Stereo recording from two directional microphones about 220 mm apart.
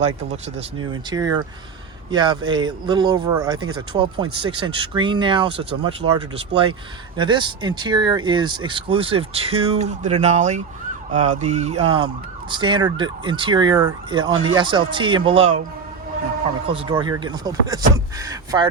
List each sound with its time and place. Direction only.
0.0 s speech: 30° right (ahead or behind)
1.1 s speech: 20° right (ahead or behind)
16.6 s speech: 25° right (ahead or behind)
18.2 s a sound: 15° right (ahead or behind)